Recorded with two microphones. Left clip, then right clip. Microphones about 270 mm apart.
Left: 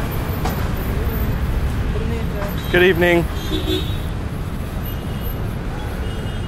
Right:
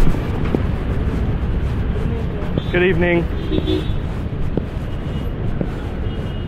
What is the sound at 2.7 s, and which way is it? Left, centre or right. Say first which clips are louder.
Speech: left 3 dB; left.